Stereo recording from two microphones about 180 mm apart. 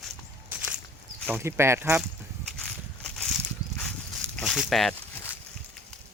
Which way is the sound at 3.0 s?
5° left (ahead or behind).